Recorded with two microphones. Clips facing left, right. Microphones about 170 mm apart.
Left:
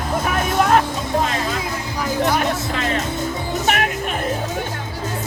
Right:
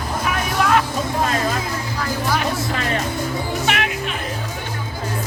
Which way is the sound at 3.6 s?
45° left (ahead or behind).